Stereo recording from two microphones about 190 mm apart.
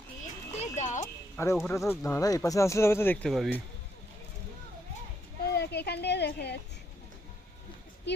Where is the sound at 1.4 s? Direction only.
15° left (ahead or behind).